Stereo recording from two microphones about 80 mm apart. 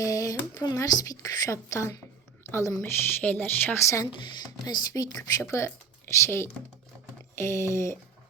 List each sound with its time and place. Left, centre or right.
0.0 s a woman's voice: left
3.8 s speech: left
4.6 s speech: left
5.4 s speech: left